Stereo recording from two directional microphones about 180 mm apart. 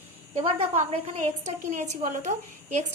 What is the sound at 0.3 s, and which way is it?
A woman's voice, 35° right (ahead or behind).